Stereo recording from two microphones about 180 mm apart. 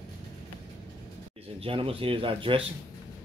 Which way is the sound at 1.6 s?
30° right (ahead or behind).